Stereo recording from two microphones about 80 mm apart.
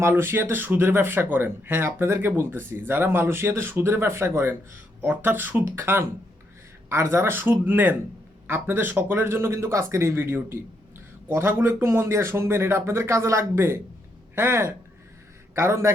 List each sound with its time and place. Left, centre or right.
0.0 s speech: right